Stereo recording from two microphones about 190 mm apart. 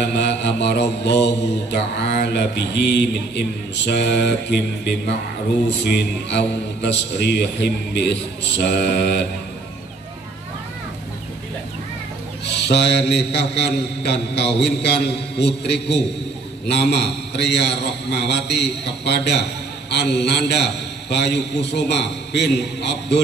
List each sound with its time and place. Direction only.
0.0 s mantra: 65° left (ahead or behind)
12.4 s mantra: 65° left (ahead or behind)